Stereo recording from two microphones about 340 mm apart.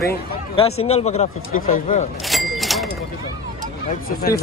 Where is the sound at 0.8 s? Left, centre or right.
Centre.